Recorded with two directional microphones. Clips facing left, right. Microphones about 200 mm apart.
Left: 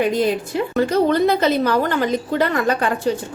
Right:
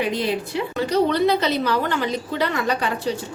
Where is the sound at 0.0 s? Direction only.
45° left (ahead or behind).